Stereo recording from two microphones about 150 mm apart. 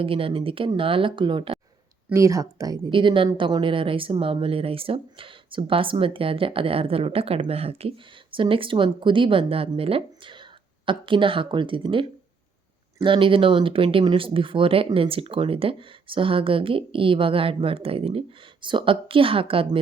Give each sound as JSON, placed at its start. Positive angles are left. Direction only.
{"t": 0.0, "sound": "speech", "side_deg": -35}
{"t": 2.0, "sound": "speech", "side_deg": -20}